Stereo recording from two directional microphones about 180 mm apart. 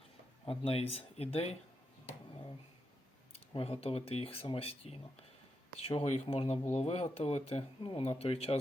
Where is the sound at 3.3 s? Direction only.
30° left (ahead or behind).